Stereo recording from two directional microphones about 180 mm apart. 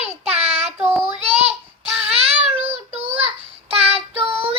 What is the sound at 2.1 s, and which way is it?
Child singing, 35° right (ahead or behind).